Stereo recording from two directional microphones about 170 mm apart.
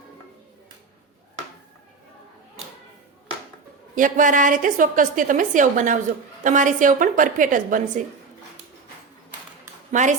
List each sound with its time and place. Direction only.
3.9 s a woman's voice: 50° right (ahead or behind)
9.9 s a woman's voice: 45° right (ahead or behind)